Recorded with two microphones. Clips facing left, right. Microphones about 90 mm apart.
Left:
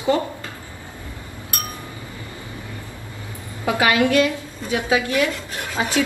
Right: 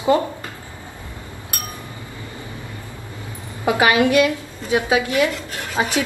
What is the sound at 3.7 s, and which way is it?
Speech, 25° right (ahead or behind).